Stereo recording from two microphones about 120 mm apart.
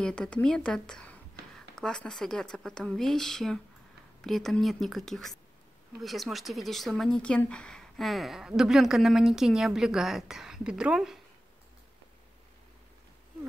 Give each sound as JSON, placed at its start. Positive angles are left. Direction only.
{"t": 0.0, "sound": "a woman's voice", "side_deg": 10}